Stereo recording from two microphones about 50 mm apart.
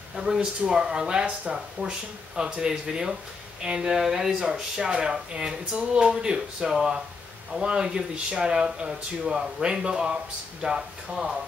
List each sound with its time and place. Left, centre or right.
0.1 s speech: centre